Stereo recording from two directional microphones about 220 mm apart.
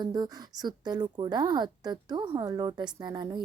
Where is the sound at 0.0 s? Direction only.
20° right (ahead or behind).